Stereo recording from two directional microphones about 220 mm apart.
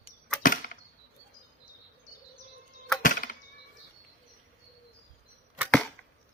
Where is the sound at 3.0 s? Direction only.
40° left (ahead or behind).